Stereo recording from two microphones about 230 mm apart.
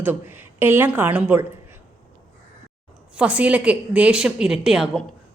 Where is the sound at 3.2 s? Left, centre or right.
Centre.